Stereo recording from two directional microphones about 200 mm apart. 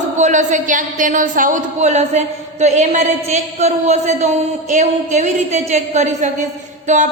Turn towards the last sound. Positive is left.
turn(degrees=-40)  # may be behind; listen again after turning